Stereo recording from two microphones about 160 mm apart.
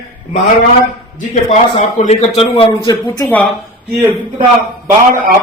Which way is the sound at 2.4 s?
35° left (ahead or behind).